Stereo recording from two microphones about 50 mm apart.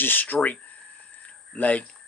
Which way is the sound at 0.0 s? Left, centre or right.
Left.